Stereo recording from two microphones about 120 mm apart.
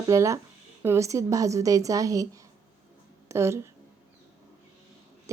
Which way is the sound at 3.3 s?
25° right (ahead or behind).